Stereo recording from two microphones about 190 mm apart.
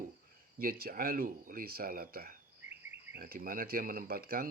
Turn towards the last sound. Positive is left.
turn(degrees=-50)  # may be behind; listen again after turning